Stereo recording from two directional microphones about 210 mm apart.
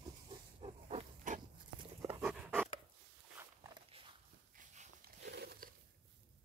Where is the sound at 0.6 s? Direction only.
35° right (ahead or behind).